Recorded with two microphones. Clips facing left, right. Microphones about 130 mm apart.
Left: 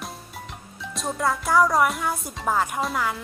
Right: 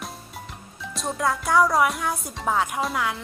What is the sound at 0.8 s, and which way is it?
Speech, centre (ahead or behind).